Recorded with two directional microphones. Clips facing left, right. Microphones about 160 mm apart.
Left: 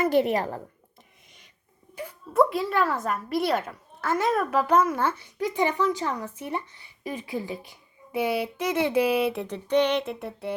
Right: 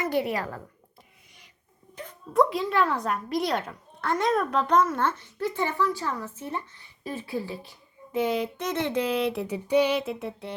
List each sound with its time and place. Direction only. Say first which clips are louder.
0.3 s speech: left 4 dB; 25° left (ahead or behind)
2.0 s a woman's voice: left 1 dB; 5° left (ahead or behind)